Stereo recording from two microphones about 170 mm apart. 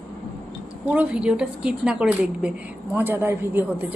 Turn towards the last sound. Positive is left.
turn(degrees=-10)  # may be behind; listen again after turning